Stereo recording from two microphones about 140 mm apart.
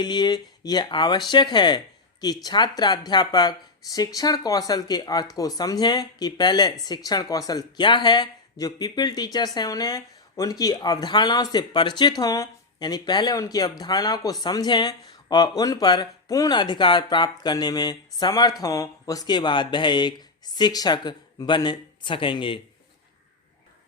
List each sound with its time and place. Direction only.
0.0 s speech: 30° left (ahead or behind)